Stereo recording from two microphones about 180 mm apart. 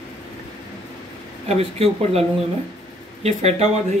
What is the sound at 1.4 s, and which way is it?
Speech, 35° right (ahead or behind).